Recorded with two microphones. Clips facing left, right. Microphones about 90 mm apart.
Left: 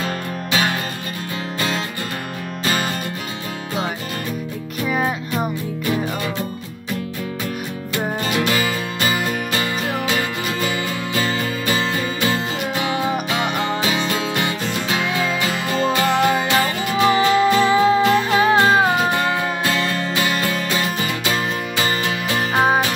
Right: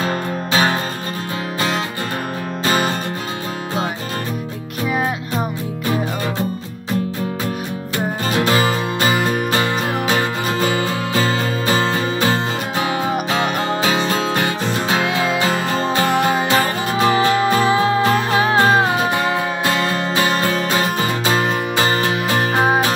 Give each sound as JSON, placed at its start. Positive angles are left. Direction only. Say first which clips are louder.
{"t": 0.0, "sound": "music", "louder": "right 4 dB", "side_deg": -35}
{"t": 2.6, "sound": "music", "louder": "right 4 dB", "side_deg": -30}
{"t": 8.3, "sound": "music", "louder": "right 5 dB", "side_deg": -35}